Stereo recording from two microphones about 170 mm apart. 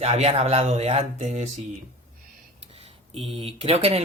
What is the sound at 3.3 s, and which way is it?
Speech, 35° right (ahead or behind).